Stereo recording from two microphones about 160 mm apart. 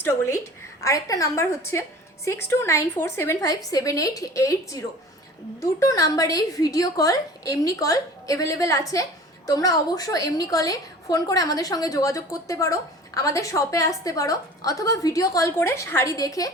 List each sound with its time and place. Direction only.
0.0 s a woman's voice: 15° left (ahead or behind)